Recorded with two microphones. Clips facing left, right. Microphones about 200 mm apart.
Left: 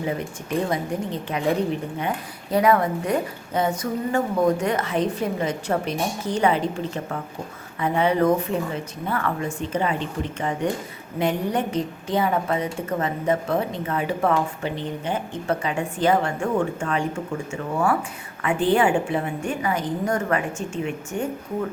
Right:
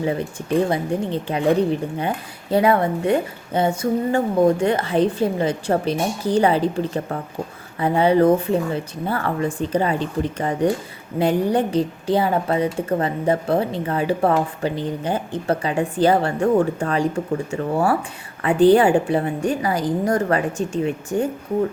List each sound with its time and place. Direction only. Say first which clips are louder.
0.7 s a woman's voice: right 4 dB; 30° right (ahead or behind)